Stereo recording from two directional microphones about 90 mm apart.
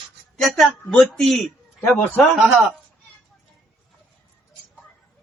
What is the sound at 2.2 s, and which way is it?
Speech, centre (ahead or behind).